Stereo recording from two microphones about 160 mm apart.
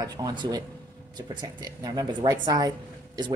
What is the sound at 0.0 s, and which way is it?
Speech, 25° right (ahead or behind).